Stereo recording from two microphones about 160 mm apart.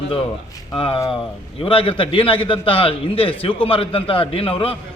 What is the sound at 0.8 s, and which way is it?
A man's voice, 35° left (ahead or behind).